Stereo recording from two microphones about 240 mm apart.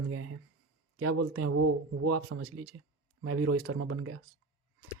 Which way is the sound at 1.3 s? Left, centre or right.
Right.